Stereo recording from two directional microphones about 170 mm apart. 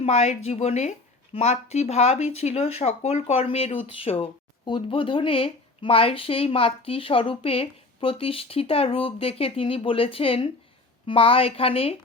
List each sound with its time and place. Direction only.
0.0 s speech: 40° left (ahead or behind)